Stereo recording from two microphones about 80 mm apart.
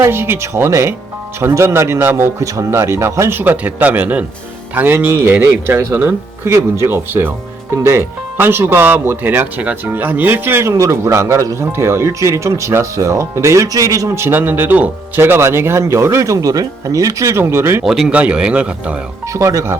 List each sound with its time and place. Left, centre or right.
0.0 s speech: right
17.8 s speech: centre
18.1 s speech: centre
19.3 s speech: right